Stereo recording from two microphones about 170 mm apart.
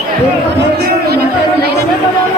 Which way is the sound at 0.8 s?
65° right (ahead or behind).